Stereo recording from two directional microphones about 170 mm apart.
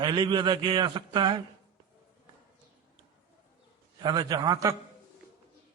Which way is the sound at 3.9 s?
25° right (ahead or behind).